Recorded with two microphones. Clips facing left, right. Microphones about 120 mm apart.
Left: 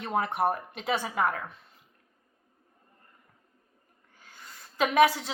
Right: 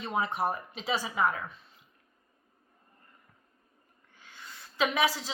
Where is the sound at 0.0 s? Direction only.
55° left (ahead or behind).